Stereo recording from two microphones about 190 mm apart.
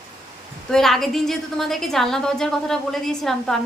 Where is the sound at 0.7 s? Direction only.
Centre (ahead or behind).